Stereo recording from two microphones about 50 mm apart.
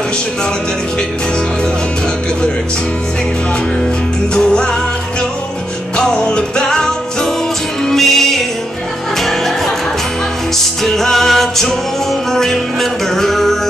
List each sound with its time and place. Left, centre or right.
4.3 s music: centre
5.9 s music: centre
10.8 s music: centre